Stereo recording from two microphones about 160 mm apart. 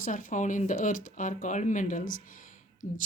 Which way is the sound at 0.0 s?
55° left (ahead or behind).